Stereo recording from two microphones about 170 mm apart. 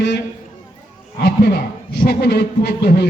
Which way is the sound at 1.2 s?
75° left (ahead or behind).